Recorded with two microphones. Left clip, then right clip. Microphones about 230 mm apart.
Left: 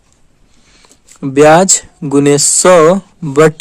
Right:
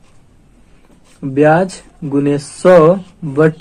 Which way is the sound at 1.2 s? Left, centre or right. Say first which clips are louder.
Left 5 dB; left.